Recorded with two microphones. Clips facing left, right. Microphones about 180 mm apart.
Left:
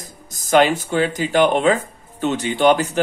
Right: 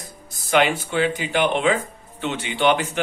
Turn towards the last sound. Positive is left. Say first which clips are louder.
# left 4 dB
turn(degrees=40)  # may be behind; listen again after turning